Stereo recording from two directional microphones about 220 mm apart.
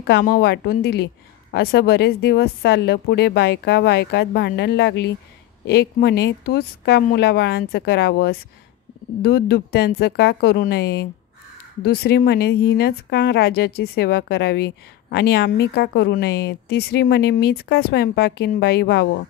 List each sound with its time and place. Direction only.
0.0 s a woman's voice: 45° left (ahead or behind)